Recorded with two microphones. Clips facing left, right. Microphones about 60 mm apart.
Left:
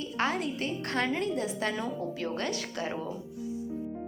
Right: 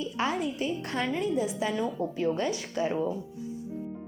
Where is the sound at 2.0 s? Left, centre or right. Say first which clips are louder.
Right 5 dB; right.